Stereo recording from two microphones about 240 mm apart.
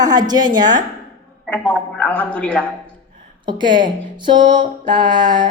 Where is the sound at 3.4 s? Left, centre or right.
Centre.